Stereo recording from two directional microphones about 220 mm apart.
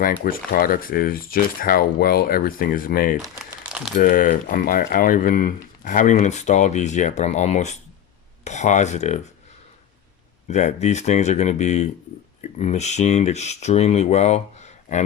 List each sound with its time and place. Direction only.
0.0 s speech: 40° left (ahead or behind)
10.5 s speech: 30° left (ahead or behind)